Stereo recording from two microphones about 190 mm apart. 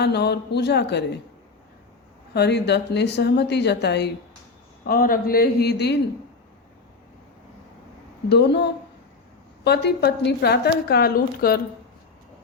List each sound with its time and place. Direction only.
0.0 s a woman's voice: 60° left (ahead or behind)
2.3 s a woman's voice: 60° left (ahead or behind)
4.9 s a man's voice: 50° left (ahead or behind)
8.3 s a woman's voice: 60° left (ahead or behind)